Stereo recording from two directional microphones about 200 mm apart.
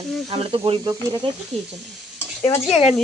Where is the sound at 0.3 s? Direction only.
25° right (ahead or behind).